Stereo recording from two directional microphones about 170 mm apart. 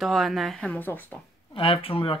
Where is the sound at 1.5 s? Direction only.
35° left (ahead or behind).